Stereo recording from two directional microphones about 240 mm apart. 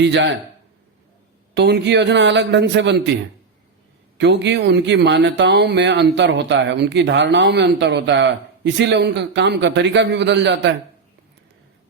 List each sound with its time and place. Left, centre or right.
0.0 s a man's voice: right
1.5 s a man's voice: right
4.2 s a man's voice: right